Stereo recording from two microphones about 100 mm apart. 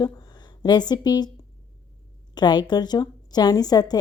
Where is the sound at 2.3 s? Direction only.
45° left (ahead or behind).